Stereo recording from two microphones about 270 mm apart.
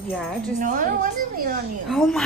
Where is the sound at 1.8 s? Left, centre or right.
Centre.